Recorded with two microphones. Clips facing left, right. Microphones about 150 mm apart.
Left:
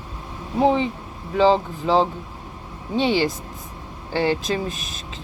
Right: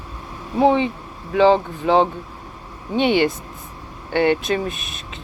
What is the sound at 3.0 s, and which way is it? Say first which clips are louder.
Speech: right 3 dB; 30° left (ahead or behind).